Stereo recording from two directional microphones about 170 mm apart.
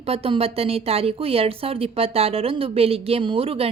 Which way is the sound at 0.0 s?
35° right (ahead or behind).